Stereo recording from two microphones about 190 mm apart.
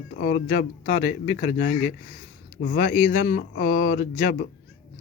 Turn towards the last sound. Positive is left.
turn(degrees=45)  # may be behind; listen again after turning